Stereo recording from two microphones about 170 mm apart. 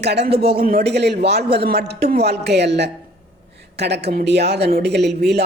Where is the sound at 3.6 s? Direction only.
80° right.